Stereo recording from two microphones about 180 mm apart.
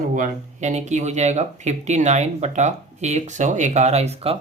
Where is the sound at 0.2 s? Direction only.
40° right (ahead or behind).